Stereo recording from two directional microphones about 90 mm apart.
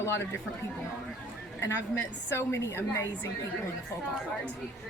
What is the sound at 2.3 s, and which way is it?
Speech, 30° left (ahead or behind).